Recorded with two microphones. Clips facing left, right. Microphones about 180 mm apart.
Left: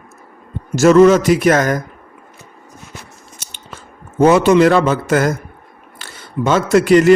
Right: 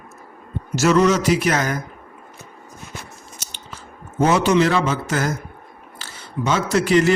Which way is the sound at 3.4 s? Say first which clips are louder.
Left 5 dB; 55° left (ahead or behind).